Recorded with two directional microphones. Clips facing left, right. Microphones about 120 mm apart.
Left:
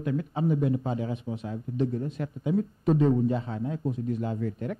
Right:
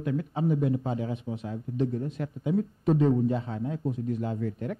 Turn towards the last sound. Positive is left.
turn(degrees=15)  # may be behind; listen again after turning